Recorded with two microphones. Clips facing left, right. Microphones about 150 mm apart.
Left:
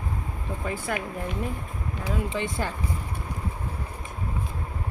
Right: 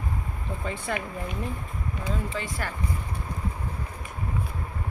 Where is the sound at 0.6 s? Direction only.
5° left (ahead or behind).